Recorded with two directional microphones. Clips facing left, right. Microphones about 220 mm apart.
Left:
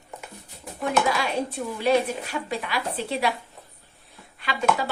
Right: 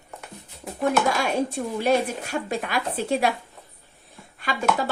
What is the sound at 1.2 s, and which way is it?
A woman's voice, 45° right (ahead or behind).